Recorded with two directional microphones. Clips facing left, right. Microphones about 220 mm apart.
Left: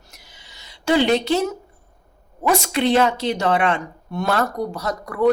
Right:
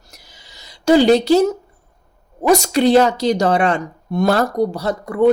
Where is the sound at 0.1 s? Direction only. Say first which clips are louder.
Right 6 dB; 40° right (ahead or behind).